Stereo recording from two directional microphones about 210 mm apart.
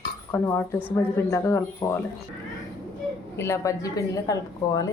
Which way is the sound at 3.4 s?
15° left (ahead or behind).